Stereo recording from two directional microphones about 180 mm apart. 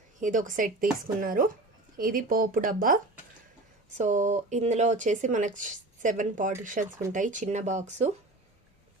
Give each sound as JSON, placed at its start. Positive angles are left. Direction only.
{"t": 0.2, "sound": "speech", "side_deg": -45}